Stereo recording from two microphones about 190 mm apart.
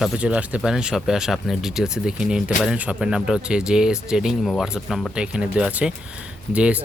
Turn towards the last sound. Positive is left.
turn(degrees=-5)  # may be behind; listen again after turning